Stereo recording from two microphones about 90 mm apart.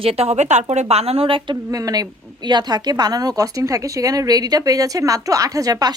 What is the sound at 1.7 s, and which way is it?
A woman's voice, 45° right (ahead or behind).